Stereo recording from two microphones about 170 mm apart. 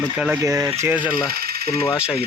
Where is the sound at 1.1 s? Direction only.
65° right (ahead or behind).